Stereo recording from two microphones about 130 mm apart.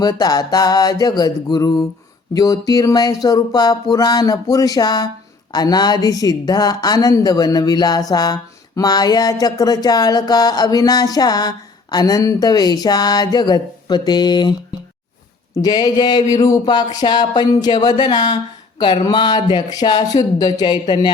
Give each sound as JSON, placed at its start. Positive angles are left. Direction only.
{"t": 0.0, "sound": "a woman's voice", "side_deg": 30}
{"t": 15.5, "sound": "a woman's voice", "side_deg": 30}